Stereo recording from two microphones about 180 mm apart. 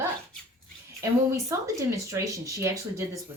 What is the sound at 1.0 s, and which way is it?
Speech, 15° right (ahead or behind).